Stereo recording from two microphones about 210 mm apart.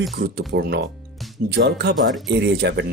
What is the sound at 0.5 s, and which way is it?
Speech, 55° right (ahead or behind).